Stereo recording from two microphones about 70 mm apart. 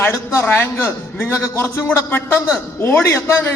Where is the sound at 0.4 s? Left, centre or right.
Left.